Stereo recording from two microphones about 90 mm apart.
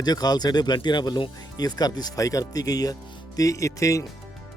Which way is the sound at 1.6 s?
45° left (ahead or behind).